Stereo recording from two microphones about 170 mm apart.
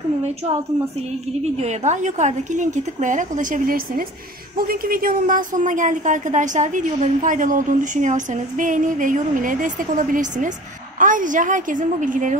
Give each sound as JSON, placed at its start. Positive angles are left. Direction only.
{"t": 1.4, "sound": "a woman's voice", "side_deg": -40}